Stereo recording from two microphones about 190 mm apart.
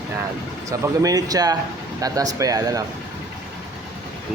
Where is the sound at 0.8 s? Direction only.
20° right (ahead or behind).